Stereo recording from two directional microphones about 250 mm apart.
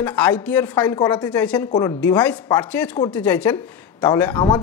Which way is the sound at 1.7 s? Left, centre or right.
Centre.